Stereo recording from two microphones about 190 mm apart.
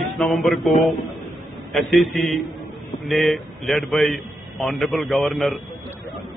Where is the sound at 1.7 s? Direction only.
Centre (ahead or behind).